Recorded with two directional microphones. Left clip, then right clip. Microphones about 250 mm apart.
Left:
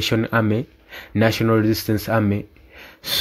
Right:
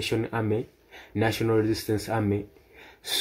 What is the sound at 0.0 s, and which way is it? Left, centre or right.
Speech, left.